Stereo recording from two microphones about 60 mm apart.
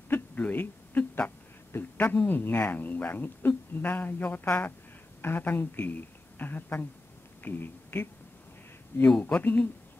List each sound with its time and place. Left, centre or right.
0.1 s a sound: left
2.2 s a woman's voice: left
9.3 s speech: left